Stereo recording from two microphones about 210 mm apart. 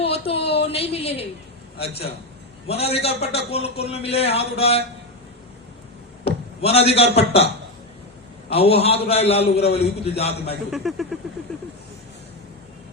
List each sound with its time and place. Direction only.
0.3 s a woman's voice: 30° left (ahead or behind)
2.6 s a man's voice: 30° left (ahead or behind)
6.2 s a man's voice: 30° left (ahead or behind)
10.7 s speech: centre (ahead or behind)